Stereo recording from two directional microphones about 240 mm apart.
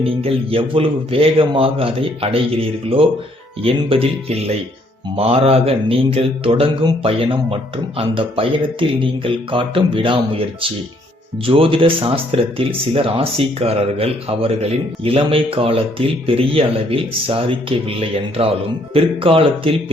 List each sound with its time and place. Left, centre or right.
0.0 s speech: right